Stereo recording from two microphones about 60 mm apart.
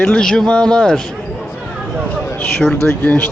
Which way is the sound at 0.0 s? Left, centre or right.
Centre.